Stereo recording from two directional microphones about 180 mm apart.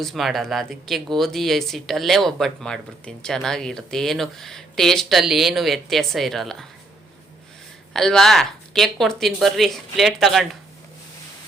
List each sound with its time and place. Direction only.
0.0 s speech: centre (ahead or behind)
7.9 s speech: centre (ahead or behind)